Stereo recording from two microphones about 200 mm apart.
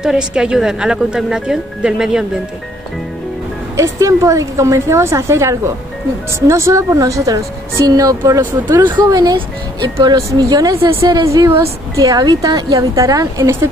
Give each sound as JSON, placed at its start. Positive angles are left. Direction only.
{"t": 0.0, "sound": "speech", "side_deg": -5}
{"t": 3.7, "sound": "a woman's voice", "side_deg": -15}